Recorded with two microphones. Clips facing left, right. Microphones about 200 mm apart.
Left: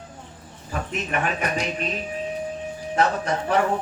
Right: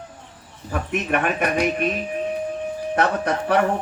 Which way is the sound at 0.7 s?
60° right (ahead or behind).